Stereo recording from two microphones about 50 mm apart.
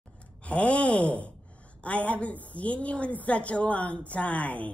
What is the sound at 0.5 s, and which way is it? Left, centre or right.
A woman's voice, left.